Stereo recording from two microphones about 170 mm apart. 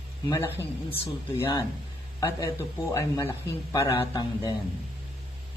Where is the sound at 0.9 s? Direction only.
30° left (ahead or behind).